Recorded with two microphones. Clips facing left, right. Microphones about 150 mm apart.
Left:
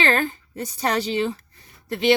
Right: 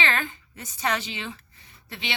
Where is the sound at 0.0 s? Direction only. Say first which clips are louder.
Left 6 dB; 40° left (ahead or behind).